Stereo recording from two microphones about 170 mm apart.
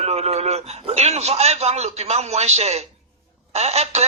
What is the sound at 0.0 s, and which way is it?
A man's voice, 40° right (ahead or behind).